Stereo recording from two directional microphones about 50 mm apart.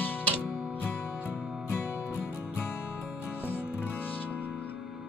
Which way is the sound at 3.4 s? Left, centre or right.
Left.